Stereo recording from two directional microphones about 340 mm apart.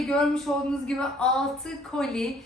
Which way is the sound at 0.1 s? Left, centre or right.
Centre.